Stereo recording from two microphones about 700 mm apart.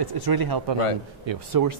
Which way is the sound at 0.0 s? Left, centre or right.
Right.